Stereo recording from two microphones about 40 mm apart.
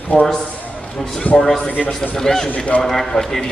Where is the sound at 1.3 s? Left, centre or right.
Left.